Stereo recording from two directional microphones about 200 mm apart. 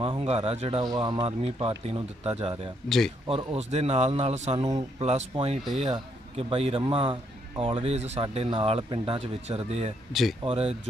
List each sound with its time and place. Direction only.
0.0 s a man's voice: 25° right (ahead or behind)
10.1 s speech: centre (ahead or behind)
10.4 s a man's voice: 30° right (ahead or behind)